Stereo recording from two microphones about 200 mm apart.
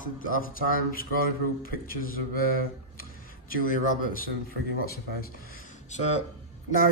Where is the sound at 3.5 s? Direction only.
45° left (ahead or behind).